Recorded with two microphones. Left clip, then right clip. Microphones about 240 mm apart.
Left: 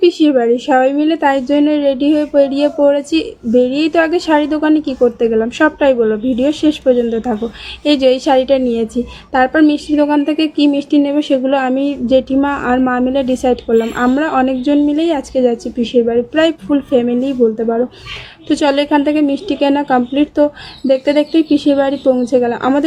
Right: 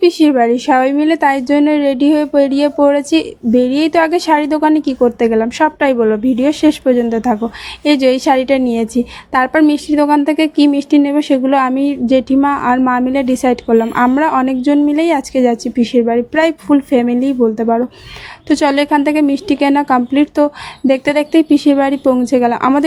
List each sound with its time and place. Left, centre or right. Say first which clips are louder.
0.0 s a woman's voice: right 1 dB; right